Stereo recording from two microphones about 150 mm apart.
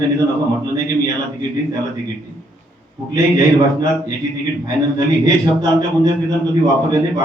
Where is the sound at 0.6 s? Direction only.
25° right (ahead or behind).